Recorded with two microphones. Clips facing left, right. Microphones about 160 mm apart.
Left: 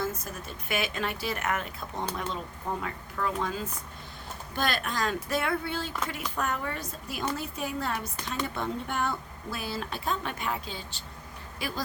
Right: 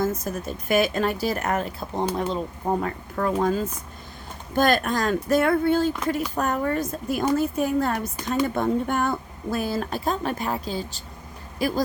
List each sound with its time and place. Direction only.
0.0 s a woman's voice: 40° right (ahead or behind)
2.6 s a woman's voice: 45° right (ahead or behind)